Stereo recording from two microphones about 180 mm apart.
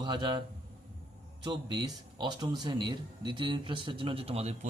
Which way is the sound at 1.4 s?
25° right (ahead or behind).